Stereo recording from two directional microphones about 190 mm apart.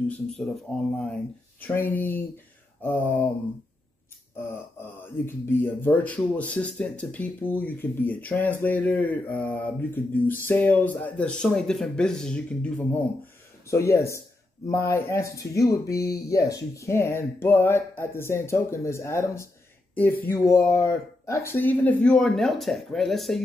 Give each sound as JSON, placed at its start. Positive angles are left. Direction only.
{"t": 0.3, "sound": "speech", "side_deg": 5}
{"t": 5.0, "sound": "speech", "side_deg": 10}